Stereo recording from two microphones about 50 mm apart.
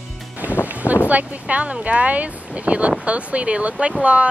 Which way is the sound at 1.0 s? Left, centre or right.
Right.